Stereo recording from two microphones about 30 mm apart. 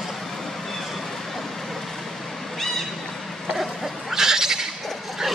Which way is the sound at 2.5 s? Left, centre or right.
Centre.